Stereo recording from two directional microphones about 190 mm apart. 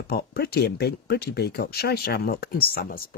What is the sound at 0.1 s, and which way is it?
Speech, 55° left (ahead or behind).